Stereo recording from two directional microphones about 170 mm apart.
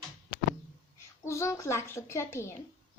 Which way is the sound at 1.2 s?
15° left (ahead or behind).